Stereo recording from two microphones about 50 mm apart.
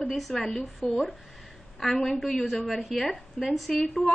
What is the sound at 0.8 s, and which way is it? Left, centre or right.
Speech, right.